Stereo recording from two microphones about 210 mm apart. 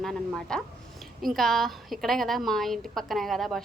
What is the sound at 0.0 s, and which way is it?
A woman's voice, centre (ahead or behind).